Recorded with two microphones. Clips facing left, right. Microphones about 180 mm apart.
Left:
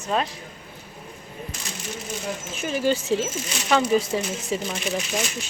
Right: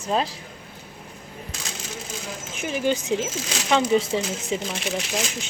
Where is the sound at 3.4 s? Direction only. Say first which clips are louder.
Right 1 dB; 90° right.